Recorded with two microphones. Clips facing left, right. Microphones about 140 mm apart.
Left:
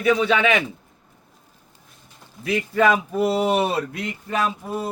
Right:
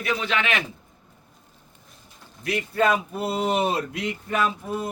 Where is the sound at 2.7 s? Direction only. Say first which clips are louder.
Left 3 dB; 90° left; by 3.8 s 75° left (ahead or behind).